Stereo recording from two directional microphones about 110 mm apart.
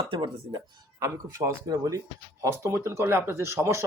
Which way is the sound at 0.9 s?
25° right (ahead or behind).